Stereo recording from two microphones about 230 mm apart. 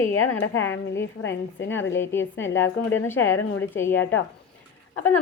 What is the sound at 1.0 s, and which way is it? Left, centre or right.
A woman's voice, left.